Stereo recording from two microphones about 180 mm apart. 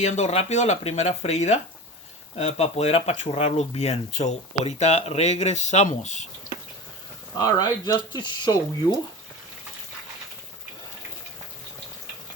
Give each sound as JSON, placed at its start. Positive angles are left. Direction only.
{"t": 0.0, "sound": "speech", "side_deg": 40}
{"t": 7.3, "sound": "speech", "side_deg": 20}